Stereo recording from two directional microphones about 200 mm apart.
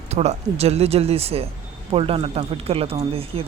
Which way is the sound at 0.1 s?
35° right (ahead or behind).